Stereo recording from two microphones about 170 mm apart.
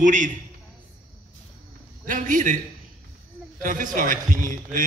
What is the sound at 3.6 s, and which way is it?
A man's voice, 50° right (ahead or behind).